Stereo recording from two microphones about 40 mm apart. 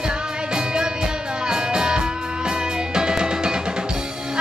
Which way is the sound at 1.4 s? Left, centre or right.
Centre.